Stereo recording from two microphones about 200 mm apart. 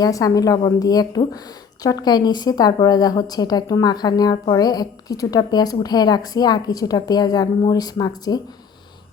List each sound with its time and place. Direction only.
0.0 s a woman's voice: 15° left (ahead or behind)